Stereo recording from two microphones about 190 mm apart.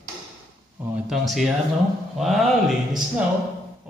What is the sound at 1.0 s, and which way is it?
Speech, centre (ahead or behind).